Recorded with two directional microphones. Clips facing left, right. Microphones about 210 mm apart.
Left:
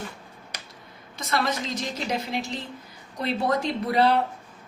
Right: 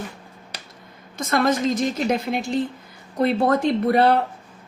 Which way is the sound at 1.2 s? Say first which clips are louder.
Right 7 dB; 50° right (ahead or behind).